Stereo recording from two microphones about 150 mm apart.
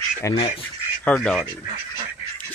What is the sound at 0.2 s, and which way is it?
Speech, 20° left (ahead or behind).